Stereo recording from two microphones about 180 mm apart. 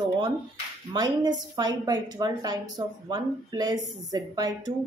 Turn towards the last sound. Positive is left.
turn(degrees=-20)  # may be behind; listen again after turning